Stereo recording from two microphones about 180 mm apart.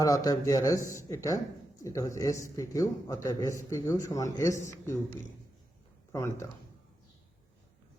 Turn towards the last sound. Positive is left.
turn(degrees=15)  # may be behind; listen again after turning